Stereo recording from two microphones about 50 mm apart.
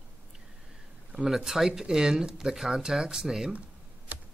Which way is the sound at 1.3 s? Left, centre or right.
Centre.